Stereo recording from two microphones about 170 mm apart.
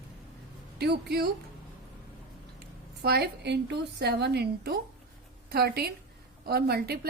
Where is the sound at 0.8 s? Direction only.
70° right (ahead or behind).